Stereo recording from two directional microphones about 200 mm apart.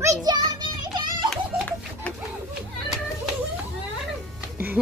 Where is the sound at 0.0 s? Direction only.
20° right (ahead or behind).